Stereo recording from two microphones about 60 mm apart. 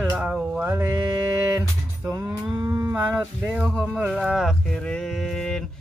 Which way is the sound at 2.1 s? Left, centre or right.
Right.